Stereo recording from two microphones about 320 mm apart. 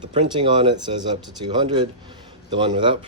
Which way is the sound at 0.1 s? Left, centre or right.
Centre.